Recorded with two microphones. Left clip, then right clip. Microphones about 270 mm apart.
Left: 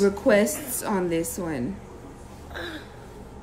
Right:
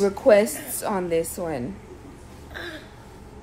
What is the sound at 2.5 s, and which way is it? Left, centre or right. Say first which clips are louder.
Gasp: even; centre.